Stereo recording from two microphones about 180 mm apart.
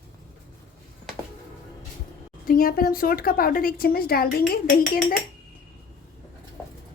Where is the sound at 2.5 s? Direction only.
55° left (ahead or behind).